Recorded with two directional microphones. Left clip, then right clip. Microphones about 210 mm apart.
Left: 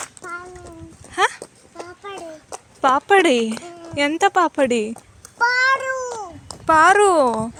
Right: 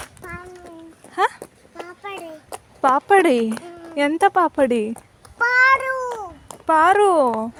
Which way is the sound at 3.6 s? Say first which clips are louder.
Even; 15° right (ahead or behind).